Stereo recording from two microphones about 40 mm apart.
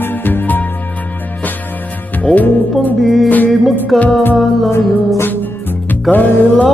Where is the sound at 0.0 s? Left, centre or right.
Left.